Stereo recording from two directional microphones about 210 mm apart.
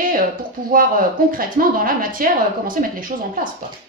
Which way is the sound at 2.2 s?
40° right (ahead or behind).